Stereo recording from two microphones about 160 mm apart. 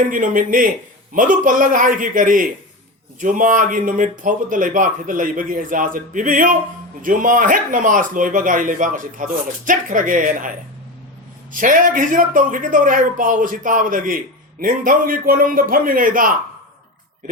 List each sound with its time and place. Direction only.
0.1 s speech: 60° right (ahead or behind)
11.5 s speech: 55° right (ahead or behind)